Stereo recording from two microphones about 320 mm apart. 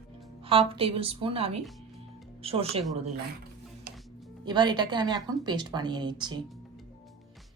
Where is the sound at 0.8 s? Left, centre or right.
Centre.